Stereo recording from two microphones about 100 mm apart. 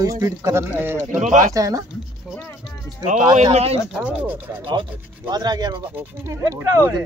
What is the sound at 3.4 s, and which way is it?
Speech, 90° right.